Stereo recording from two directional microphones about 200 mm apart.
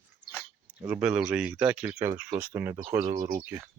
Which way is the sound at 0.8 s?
5° right (ahead or behind).